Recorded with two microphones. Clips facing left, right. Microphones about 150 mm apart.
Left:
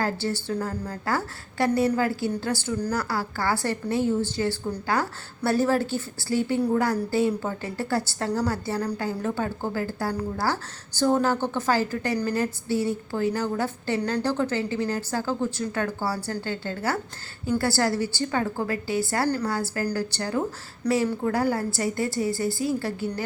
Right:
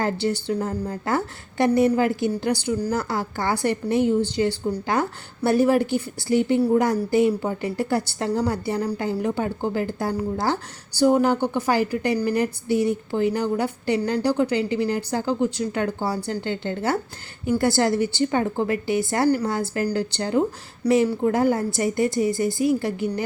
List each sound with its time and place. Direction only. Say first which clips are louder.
0.0 s a woman's voice: right 3 dB; 15° right (ahead or behind)